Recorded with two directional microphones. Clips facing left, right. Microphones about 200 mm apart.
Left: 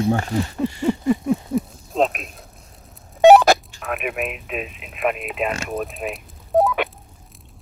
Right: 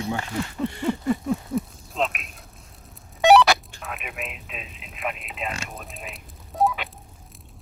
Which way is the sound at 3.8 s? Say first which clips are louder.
Left 9 dB; 55° left (ahead or behind).